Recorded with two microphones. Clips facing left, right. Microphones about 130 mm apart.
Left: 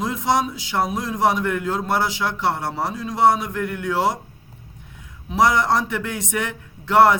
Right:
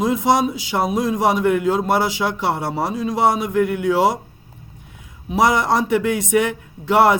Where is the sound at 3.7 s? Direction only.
10° right (ahead or behind).